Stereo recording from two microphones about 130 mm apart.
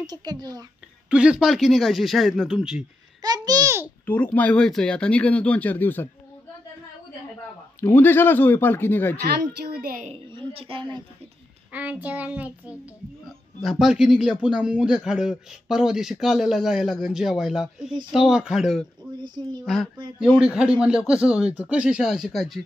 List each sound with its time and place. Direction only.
0.0 s a woman's voice: 30° right (ahead or behind)
1.1 s speech: 5° right (ahead or behind)
3.2 s a child's voice: 30° right (ahead or behind)
4.0 s speech: 10° left (ahead or behind)
7.8 s speech: 15° left (ahead or behind)
10.1 s a woman's voice: 45° right (ahead or behind)
11.7 s speech: 10° right (ahead or behind)
20.3 s speech: 5° right (ahead or behind)